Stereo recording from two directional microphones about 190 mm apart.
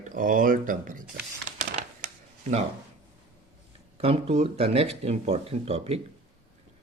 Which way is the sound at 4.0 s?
30° right (ahead or behind).